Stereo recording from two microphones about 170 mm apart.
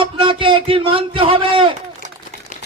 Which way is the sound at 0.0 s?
30° right (ahead or behind).